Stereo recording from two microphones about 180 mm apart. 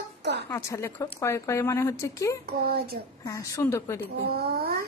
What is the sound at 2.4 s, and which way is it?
Speech, 55° right (ahead or behind).